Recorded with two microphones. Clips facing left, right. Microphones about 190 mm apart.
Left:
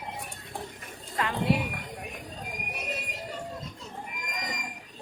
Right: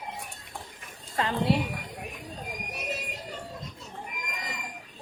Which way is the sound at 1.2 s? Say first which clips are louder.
Right 2 dB; 30° right (ahead or behind).